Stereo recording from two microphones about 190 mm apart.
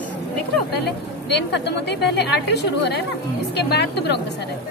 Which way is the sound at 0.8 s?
65° left (ahead or behind).